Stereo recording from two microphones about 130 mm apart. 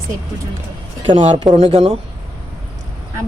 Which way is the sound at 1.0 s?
55° right (ahead or behind).